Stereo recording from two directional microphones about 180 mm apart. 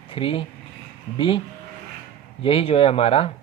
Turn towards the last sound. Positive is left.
turn(degrees=30)  # may be behind; listen again after turning